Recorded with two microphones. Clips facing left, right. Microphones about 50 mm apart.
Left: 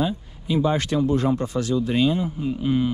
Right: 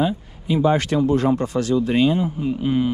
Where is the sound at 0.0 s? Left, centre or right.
Right.